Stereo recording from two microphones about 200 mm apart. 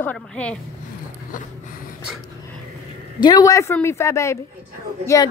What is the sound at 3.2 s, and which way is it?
A woman's voice, 20° left (ahead or behind).